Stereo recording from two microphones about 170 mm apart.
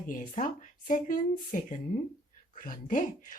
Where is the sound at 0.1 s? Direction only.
50° left (ahead or behind).